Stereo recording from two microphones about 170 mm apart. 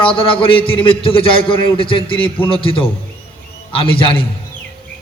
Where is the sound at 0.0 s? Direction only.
30° left (ahead or behind).